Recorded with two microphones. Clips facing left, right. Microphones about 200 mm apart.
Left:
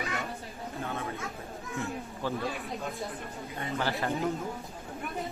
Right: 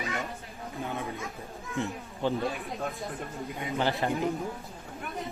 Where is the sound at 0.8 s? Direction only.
15° right (ahead or behind).